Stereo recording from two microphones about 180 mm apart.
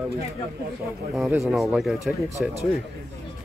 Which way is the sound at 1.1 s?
Centre (ahead or behind).